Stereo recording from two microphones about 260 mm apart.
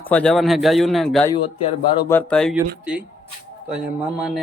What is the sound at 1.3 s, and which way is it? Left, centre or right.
Speech, centre.